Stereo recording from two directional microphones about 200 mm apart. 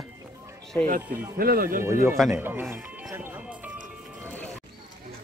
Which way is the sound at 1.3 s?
45° right (ahead or behind).